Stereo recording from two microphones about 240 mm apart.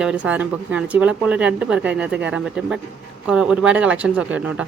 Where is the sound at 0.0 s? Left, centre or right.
Centre.